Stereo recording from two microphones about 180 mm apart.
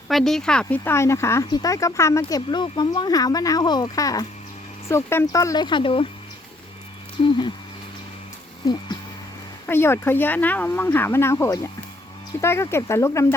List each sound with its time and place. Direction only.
0.1 s speech: centre (ahead or behind); by 6.1 s 30° left (ahead or behind)
7.2 s speech: 25° left (ahead or behind)
8.6 s speech: 25° left (ahead or behind)
9.6 s speech: 15° left (ahead or behind)